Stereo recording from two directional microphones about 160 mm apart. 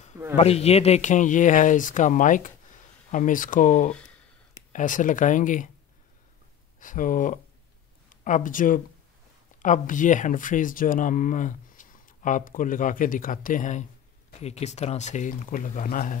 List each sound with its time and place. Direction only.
0.4 s speech: 40° left (ahead or behind)
3.9 s a sound: 5° left (ahead or behind)
4.7 s speech: 55° left (ahead or behind)
6.8 s speech: 55° left (ahead or behind)